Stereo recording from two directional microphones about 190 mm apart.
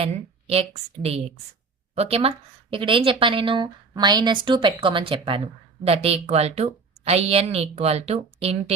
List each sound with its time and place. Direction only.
0.0 s a woman's voice: 30° right (ahead or behind)